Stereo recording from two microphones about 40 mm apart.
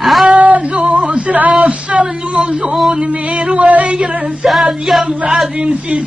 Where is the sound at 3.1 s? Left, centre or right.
Right.